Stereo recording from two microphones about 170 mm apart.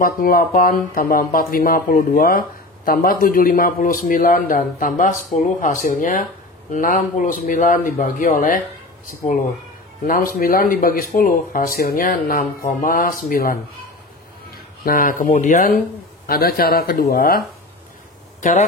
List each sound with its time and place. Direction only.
0.0 s a man's voice: 60° left (ahead or behind)
10.0 s speech: 55° left (ahead or behind)
14.9 s a man's voice: 55° left (ahead or behind)
16.3 s speech: 65° left (ahead or behind)
18.4 s speech: 45° left (ahead or behind)